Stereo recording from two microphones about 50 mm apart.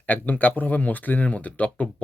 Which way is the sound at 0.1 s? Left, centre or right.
Left.